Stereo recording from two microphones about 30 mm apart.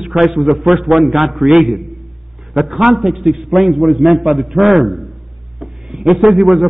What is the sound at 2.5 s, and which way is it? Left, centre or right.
A man's voice, centre.